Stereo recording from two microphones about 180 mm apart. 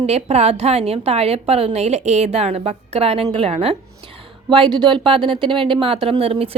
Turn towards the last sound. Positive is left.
turn(degrees=-35)  # may be behind; listen again after turning